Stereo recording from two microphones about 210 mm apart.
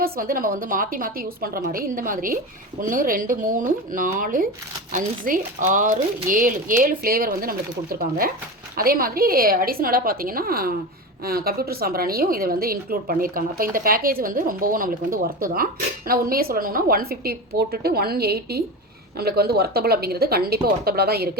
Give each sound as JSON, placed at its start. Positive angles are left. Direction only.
{"t": 0.0, "sound": "speech", "side_deg": -40}
{"t": 8.7, "sound": "a woman's voice", "side_deg": -45}